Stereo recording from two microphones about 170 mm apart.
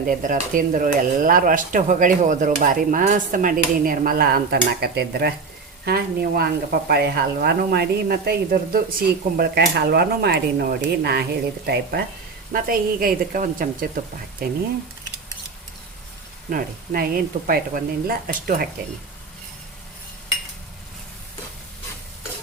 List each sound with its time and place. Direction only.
0.0 s stir: 55° right (ahead or behind); by 5.3 s 70° right (ahead or behind)
5.8 s speech: 70° right (ahead or behind)
12.6 s speech: 60° right (ahead or behind)
16.5 s speech: 55° right (ahead or behind)